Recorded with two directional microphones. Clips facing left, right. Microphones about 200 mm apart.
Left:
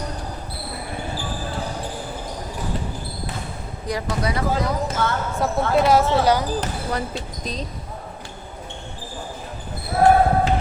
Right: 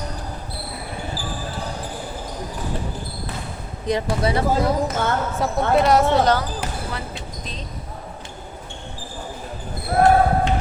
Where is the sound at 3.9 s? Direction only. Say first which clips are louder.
Right 4 dB; 25° right (ahead or behind).